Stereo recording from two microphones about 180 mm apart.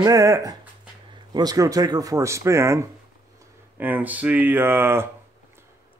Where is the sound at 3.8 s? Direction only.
10° right (ahead or behind).